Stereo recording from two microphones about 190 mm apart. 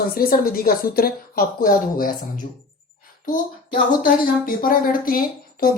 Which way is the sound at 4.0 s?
45° left (ahead or behind).